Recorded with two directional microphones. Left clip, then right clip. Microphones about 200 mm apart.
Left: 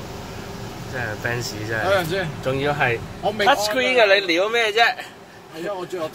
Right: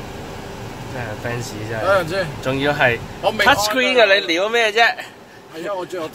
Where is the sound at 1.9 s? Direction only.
50° right (ahead or behind).